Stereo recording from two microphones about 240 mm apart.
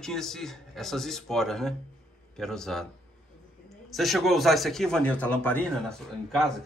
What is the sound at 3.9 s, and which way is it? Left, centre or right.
A man's voice, centre.